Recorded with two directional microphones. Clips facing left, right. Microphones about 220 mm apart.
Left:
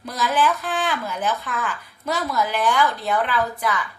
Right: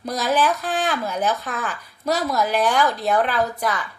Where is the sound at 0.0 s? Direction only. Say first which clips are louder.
Right 1 dB; 40° right (ahead or behind).